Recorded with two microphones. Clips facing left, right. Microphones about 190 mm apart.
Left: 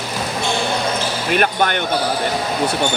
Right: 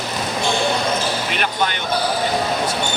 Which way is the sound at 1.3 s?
50° left (ahead or behind).